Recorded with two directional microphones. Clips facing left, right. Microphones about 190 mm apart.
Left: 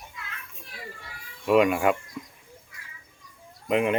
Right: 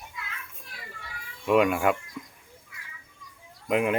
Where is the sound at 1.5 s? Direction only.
Centre (ahead or behind).